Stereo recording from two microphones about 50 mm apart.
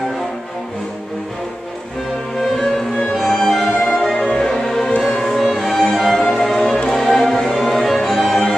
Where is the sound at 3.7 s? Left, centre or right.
Centre.